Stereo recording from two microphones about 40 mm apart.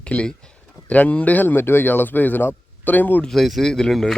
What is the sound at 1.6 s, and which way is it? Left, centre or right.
Speech, left.